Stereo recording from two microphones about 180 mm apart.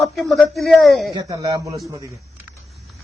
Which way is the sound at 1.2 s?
25° right (ahead or behind).